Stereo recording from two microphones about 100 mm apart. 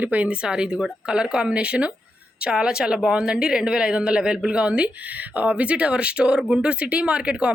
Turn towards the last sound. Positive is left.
turn(degrees=-10)  # may be behind; listen again after turning